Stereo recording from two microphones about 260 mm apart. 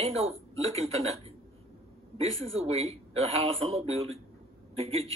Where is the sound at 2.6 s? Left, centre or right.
Right.